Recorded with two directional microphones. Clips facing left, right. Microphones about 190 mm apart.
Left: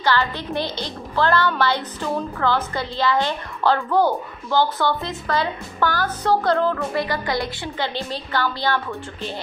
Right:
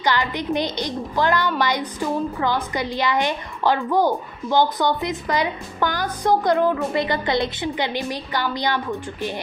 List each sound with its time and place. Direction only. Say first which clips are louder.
0.0 s a woman's voice: even; 15° right (ahead or behind)